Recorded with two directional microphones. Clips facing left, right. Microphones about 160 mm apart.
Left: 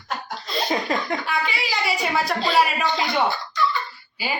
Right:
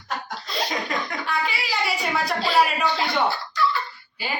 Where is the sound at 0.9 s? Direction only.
30° left (ahead or behind).